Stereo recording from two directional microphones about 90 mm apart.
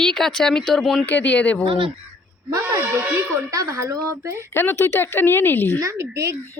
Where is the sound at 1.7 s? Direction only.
70° right (ahead or behind).